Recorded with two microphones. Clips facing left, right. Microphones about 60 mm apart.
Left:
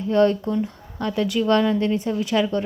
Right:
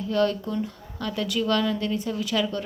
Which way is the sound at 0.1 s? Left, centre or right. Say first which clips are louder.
Left 6 dB; left.